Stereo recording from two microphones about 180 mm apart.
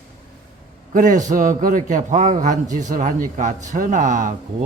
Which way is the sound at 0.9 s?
45° right (ahead or behind).